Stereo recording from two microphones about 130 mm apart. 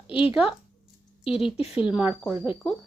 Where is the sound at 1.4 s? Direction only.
45° left (ahead or behind).